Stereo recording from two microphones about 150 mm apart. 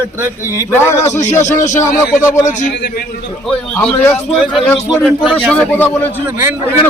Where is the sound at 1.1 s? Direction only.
50° left (ahead or behind).